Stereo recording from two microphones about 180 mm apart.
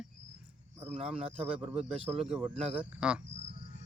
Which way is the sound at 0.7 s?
35° right (ahead or behind).